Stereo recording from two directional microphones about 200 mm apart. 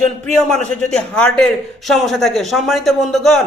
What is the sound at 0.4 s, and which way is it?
A man's voice, 5° left (ahead or behind).